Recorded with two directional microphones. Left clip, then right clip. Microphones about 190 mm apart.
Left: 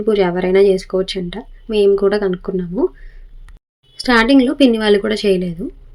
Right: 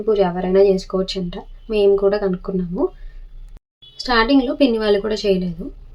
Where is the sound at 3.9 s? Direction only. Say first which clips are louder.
Left 4 dB; 20° left (ahead or behind).